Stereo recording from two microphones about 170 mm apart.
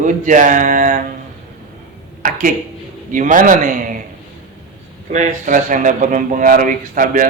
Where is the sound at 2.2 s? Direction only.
50° right (ahead or behind).